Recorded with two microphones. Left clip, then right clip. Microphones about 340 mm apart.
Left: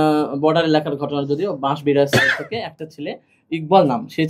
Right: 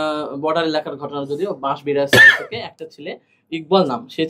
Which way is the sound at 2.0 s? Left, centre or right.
Right.